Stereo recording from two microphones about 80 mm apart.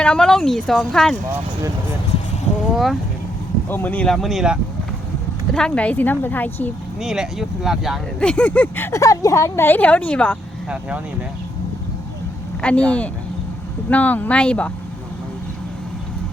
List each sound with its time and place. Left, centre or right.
0.0 s speech: centre
2.7 s speech: centre
3.7 s a woman's voice: left
4.1 s speech: centre
5.5 s a woman's voice: centre
7.0 s speech: centre
8.2 s a woman's voice: centre
8.9 s speech: left
9.6 s speech: left
10.7 s speech: centre
12.6 s speech: centre
13.9 s speech: centre